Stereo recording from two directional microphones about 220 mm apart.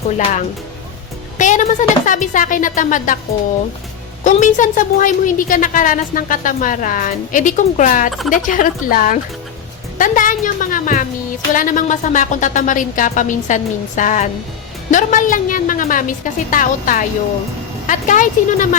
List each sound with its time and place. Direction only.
1.4 s a woman's voice: 35° left (ahead or behind)
4.2 s a woman's voice: 35° left (ahead or behind)